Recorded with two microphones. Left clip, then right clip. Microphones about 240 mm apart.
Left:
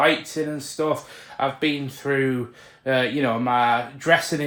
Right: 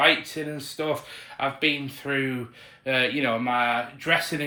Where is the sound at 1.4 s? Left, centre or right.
Left.